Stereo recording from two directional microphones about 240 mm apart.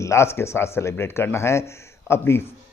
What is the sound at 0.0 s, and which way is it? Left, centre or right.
Speech, centre.